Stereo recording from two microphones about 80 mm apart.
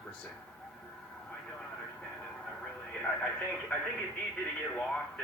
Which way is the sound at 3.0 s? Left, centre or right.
Centre.